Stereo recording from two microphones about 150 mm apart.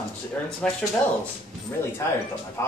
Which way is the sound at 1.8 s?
15° left (ahead or behind).